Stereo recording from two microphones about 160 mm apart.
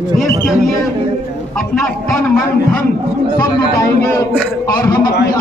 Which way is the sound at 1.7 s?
5° left (ahead or behind).